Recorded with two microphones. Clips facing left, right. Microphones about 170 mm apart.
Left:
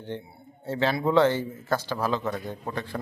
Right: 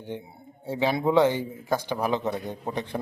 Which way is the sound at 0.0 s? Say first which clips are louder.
Even; 15° right (ahead or behind).